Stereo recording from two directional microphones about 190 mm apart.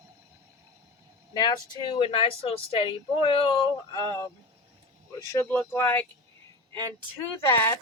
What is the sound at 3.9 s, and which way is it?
Speech, 15° left (ahead or behind).